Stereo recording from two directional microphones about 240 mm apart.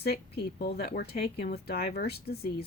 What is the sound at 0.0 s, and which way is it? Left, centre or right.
Speech, left.